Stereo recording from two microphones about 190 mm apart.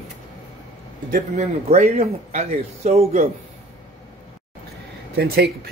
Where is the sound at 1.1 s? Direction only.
35° right (ahead or behind).